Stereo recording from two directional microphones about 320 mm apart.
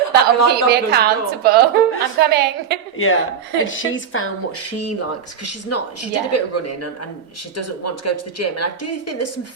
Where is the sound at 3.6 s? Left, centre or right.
Left.